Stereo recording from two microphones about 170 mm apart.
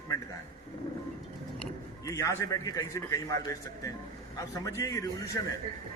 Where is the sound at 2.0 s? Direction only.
20° left (ahead or behind).